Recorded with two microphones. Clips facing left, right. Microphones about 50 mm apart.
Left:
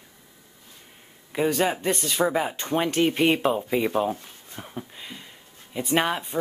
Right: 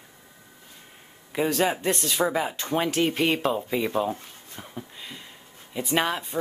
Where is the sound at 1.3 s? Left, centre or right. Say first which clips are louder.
Left 1 dB; centre.